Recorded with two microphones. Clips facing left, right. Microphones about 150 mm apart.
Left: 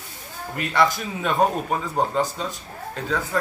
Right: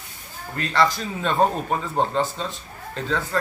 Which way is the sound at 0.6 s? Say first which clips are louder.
Even; 15° left (ahead or behind).